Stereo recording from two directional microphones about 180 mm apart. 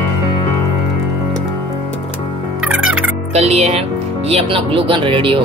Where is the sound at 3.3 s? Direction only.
35° right (ahead or behind).